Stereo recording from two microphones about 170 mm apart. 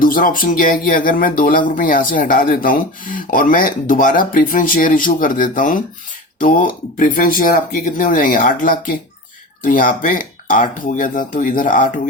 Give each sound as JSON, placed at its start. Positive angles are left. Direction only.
{"t": 0.0, "sound": "speech", "side_deg": 55}